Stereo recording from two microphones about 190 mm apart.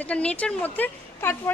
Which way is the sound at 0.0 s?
5° left (ahead or behind).